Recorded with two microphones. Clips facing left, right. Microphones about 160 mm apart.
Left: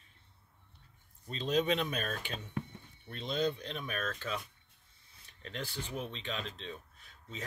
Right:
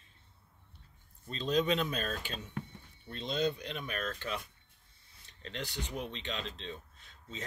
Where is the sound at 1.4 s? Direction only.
35° right (ahead or behind).